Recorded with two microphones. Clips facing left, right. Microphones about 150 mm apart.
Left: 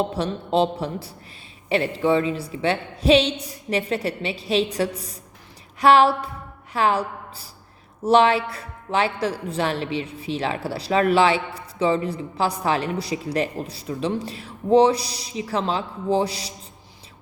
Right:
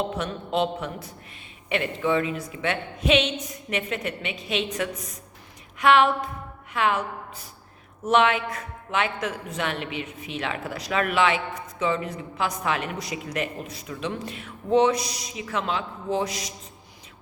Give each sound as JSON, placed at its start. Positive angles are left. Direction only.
{"t": 0.1, "sound": "a man's voice", "side_deg": 30}